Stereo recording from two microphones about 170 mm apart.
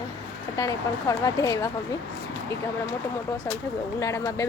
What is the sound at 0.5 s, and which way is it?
Speech, 20° left (ahead or behind).